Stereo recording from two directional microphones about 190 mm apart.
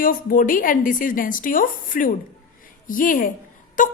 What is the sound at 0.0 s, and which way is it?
A woman's voice, 45° left (ahead or behind).